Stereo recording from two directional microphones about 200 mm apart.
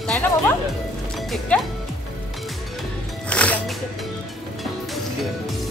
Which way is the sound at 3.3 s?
5° left (ahead or behind).